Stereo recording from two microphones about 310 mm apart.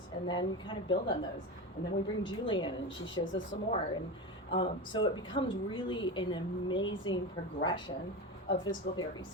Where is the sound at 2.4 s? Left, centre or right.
Centre.